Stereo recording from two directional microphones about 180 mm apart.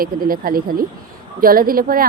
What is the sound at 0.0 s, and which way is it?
Speech, 55° right (ahead or behind).